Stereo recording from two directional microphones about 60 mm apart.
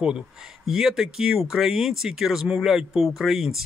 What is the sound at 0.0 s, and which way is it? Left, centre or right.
Speech, centre.